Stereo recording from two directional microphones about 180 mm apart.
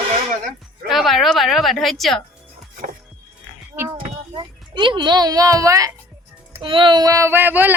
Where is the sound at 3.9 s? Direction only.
30° right (ahead or behind).